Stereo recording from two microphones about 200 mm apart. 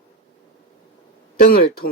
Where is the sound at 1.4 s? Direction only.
50° left (ahead or behind).